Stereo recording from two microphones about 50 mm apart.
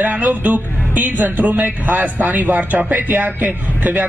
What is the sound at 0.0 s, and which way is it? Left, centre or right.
A man's voice, right.